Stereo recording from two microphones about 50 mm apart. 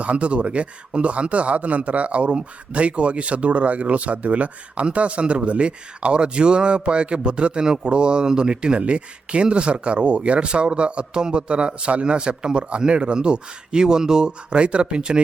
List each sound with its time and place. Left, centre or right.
0.0 s speech: right